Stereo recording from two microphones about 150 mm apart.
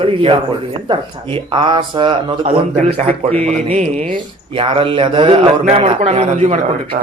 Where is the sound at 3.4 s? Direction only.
50° right (ahead or behind).